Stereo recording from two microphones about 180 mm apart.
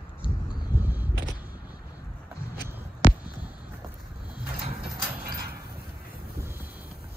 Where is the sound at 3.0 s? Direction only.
50° left (ahead or behind).